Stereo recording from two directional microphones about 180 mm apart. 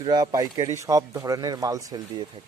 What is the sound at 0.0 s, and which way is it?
Speech, 20° right (ahead or behind).